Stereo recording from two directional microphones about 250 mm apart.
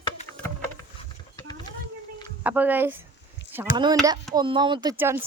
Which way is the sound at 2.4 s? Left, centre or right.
Centre.